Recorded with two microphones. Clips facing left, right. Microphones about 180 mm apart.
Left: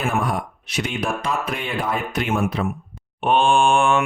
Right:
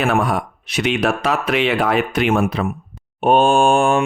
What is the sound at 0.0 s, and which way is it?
Speech, 80° right.